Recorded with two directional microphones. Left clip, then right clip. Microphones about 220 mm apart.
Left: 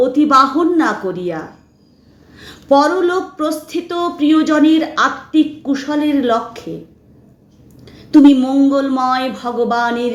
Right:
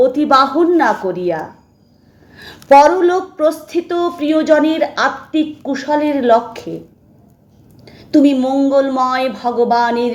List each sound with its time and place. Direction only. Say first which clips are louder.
0.0 s a woman's voice: even; 20° right (ahead or behind)
8.2 s a woman's voice: left 3 dB; 25° right (ahead or behind)